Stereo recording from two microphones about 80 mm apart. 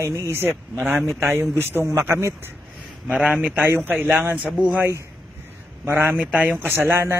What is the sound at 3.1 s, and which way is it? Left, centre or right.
Speech, centre.